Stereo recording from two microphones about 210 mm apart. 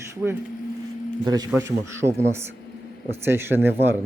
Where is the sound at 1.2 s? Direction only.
20° right (ahead or behind).